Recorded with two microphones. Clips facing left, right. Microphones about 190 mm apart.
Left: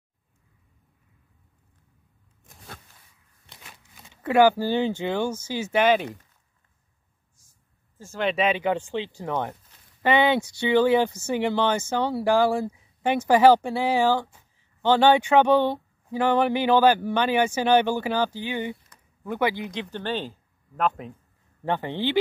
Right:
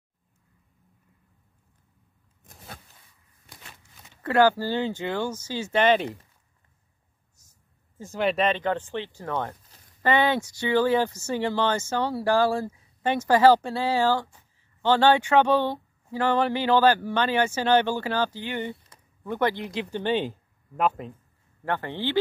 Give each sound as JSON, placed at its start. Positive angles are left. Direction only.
{"t": 4.1, "sound": "speech", "side_deg": 15}
{"t": 7.4, "sound": "a sound", "side_deg": -40}
{"t": 8.2, "sound": "speech", "side_deg": 0}
{"t": 21.6, "sound": "speech", "side_deg": 15}